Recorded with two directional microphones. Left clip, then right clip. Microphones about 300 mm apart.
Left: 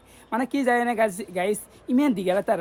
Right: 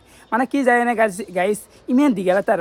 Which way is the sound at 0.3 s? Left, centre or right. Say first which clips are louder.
Right 6 dB; centre.